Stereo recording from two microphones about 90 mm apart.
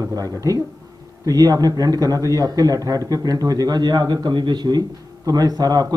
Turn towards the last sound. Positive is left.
turn(degrees=-45)  # may be behind; listen again after turning